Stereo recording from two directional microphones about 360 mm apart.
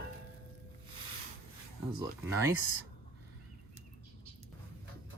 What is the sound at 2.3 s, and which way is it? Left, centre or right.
Speech, centre.